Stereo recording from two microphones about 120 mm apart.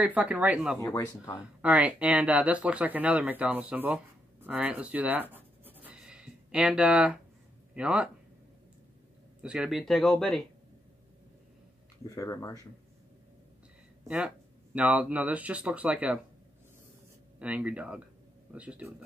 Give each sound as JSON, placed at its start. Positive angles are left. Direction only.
{"t": 0.0, "sound": "speech", "side_deg": -10}
{"t": 0.7, "sound": "speech", "side_deg": 25}
{"t": 1.6, "sound": "speech", "side_deg": -10}
{"t": 9.4, "sound": "speech", "side_deg": -5}
{"t": 12.1, "sound": "speech", "side_deg": 25}
{"t": 14.0, "sound": "speech", "side_deg": -10}
{"t": 17.4, "sound": "speech", "side_deg": -10}